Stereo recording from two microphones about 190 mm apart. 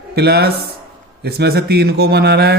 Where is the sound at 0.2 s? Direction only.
60° right (ahead or behind).